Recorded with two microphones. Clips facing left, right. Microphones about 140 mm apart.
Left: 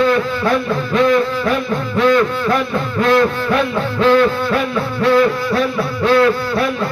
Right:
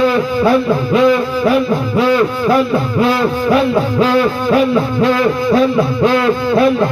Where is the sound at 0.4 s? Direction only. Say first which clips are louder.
Right 5 dB; 10° right (ahead or behind).